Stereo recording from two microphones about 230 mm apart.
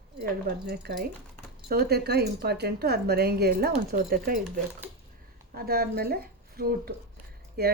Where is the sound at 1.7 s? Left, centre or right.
Right.